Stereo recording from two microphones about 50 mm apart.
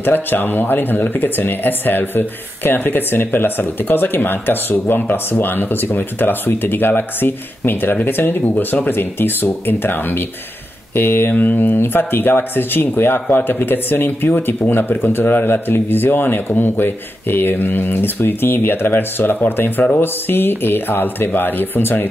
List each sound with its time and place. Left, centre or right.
0.0 s speech: left